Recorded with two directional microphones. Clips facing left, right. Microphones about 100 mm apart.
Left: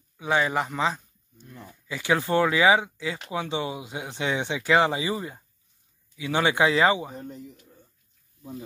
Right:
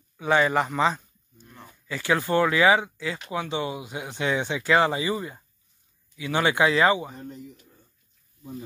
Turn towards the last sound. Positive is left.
turn(degrees=5)  # may be behind; listen again after turning